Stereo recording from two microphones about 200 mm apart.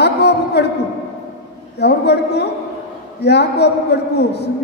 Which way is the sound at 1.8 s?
55° left (ahead or behind).